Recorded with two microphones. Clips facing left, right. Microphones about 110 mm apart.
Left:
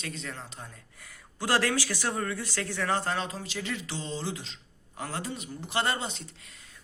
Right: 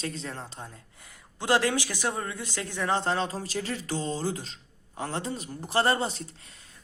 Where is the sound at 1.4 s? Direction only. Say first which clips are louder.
Right 2 dB; 20° right (ahead or behind); by 4.5 s 45° right (ahead or behind).